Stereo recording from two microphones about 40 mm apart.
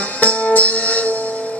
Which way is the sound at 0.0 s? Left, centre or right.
Left.